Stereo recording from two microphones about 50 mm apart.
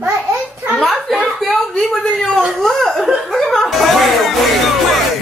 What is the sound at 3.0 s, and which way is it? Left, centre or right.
Chuckle, centre.